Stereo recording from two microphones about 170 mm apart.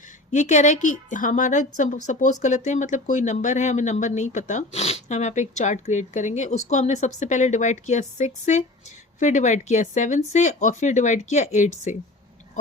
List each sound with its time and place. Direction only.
0.3 s speech: 45° left (ahead or behind)